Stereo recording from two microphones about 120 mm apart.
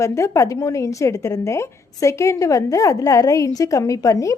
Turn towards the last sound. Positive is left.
turn(degrees=30)  # may be behind; listen again after turning